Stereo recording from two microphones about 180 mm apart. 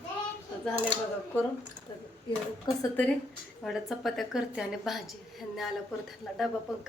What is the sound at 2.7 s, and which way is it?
Speech, 25° left (ahead or behind).